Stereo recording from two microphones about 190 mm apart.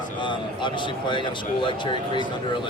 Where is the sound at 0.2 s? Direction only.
25° left (ahead or behind).